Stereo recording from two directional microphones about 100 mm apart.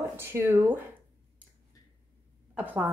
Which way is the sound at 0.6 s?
15° right (ahead or behind).